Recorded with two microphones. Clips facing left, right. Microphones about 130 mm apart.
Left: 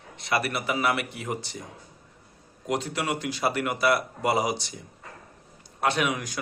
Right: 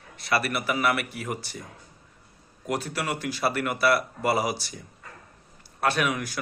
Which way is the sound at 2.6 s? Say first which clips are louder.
Left 1 dB; 20° left (ahead or behind).